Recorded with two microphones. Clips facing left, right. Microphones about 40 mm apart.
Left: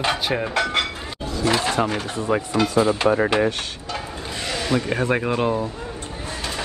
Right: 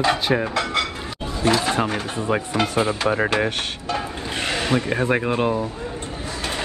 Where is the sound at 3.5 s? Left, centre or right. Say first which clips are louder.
Right 1 dB; right.